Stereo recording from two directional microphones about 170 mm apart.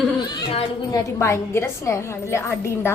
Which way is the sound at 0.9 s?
15° left (ahead or behind).